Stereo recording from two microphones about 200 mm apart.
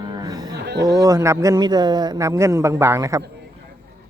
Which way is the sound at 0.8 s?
15° right (ahead or behind).